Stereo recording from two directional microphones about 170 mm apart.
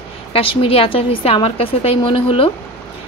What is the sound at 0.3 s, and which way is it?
A woman's voice, 30° left (ahead or behind).